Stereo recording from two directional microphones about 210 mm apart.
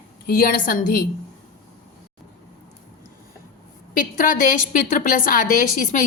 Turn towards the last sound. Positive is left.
turn(degrees=40)  # may be behind; listen again after turning